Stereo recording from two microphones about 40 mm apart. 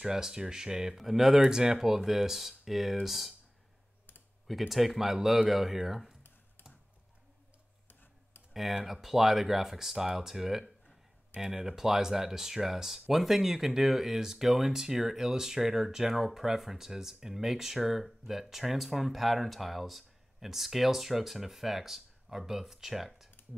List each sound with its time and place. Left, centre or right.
0.0 s speech: centre
0.9 s speech: centre
4.5 s speech: centre
7.9 s a sound: left
8.7 s speech: centre